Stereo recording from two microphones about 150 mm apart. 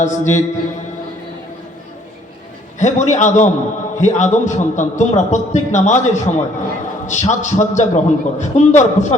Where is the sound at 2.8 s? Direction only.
55° left (ahead or behind).